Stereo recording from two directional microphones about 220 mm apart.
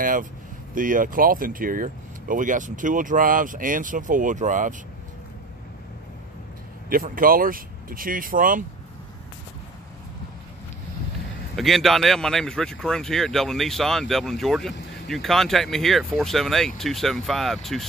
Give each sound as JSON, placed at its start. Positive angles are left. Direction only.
{"t": 0.0, "sound": "speech", "side_deg": -40}
{"t": 6.9, "sound": "speech", "side_deg": -40}
{"t": 11.5, "sound": "speech", "side_deg": 0}